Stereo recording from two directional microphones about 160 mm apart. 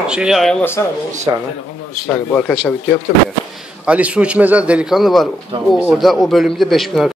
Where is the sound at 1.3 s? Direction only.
25° right (ahead or behind).